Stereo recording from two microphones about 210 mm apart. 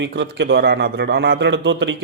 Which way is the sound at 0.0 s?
55° right (ahead or behind).